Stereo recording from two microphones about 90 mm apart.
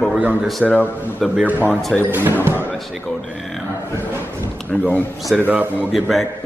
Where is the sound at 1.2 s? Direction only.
Centre (ahead or behind).